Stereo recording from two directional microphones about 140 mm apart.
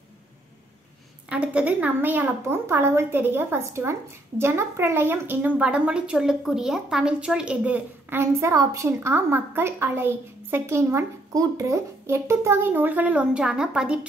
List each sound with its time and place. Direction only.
1.3 s a woman's voice: 10° right (ahead or behind)